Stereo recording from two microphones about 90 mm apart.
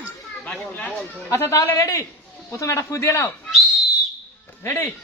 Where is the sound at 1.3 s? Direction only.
35° left (ahead or behind).